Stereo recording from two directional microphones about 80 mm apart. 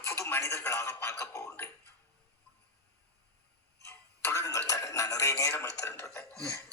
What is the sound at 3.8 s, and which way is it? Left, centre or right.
Speech, left.